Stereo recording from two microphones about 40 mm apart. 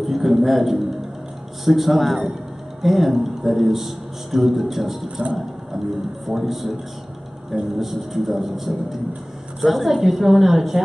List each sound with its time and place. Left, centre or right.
0.0 s a sound: centre
1.6 s a man's voice: centre
5.2 s mechanisms: right
6.2 s a man's voice: centre